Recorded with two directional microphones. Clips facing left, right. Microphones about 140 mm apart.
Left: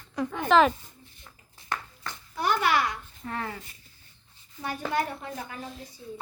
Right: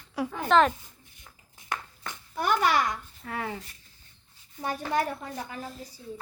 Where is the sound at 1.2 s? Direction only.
15° right (ahead or behind).